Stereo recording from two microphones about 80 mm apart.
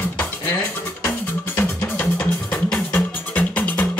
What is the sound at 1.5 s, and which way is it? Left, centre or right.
Music, left.